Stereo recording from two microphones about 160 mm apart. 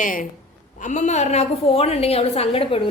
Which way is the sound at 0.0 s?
60° left (ahead or behind).